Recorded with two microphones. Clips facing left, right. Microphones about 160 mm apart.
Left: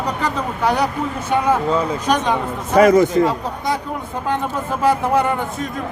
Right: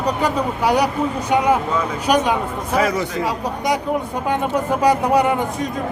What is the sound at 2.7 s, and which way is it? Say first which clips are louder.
Speech: left 8 dB; 45° left (ahead or behind).